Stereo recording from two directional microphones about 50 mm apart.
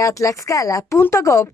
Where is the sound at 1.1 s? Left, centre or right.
Left.